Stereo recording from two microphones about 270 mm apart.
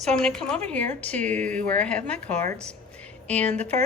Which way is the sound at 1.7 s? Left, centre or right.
Centre.